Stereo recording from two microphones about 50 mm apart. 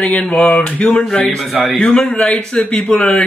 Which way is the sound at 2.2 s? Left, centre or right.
Left.